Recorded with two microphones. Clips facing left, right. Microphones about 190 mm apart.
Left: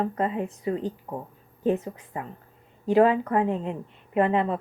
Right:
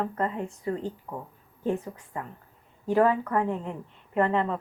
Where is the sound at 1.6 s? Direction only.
20° left (ahead or behind).